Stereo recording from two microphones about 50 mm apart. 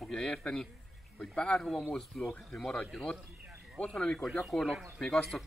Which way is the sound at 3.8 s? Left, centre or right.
Centre.